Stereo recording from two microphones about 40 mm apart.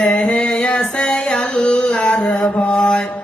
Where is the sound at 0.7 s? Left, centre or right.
Left.